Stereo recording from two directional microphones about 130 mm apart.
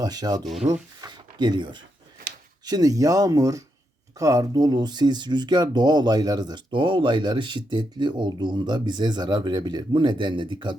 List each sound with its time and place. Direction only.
0.0 s speech: 30° right (ahead or behind)
0.7 s a sound: 35° right (ahead or behind)
2.6 s speech: 30° right (ahead or behind)